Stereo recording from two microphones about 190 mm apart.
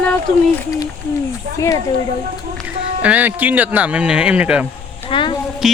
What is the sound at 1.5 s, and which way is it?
Speech, 15° left (ahead or behind).